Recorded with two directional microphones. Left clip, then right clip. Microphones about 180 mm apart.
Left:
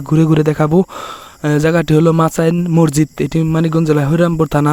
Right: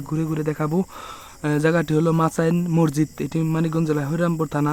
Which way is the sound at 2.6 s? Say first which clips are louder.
Left 8 dB; 25° left (ahead or behind).